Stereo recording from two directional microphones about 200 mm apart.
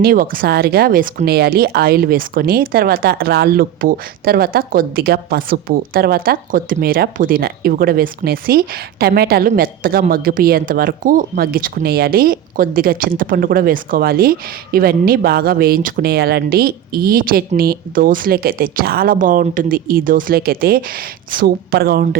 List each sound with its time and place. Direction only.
0.0 s speech: 45° right (ahead or behind)